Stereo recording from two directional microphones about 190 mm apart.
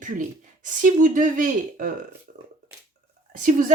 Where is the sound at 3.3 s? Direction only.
45° right (ahead or behind).